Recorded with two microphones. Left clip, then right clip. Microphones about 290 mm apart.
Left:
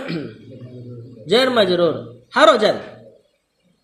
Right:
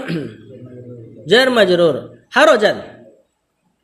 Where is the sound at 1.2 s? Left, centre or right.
Right.